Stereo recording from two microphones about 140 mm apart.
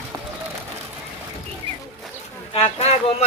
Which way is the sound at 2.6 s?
45° left (ahead or behind).